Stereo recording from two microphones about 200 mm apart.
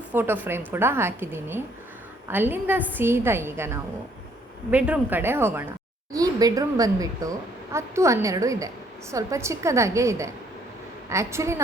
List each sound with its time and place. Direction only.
0.1 s a woman's voice: 10° right (ahead or behind)